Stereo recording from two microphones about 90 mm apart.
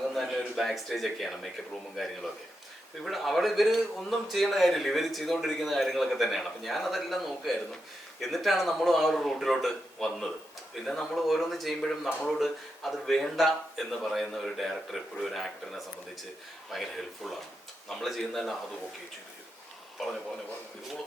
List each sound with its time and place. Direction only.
0.1 s a man's voice: centre (ahead or behind)
3.0 s a man's voice: centre (ahead or behind)
20.0 s a man's voice: centre (ahead or behind)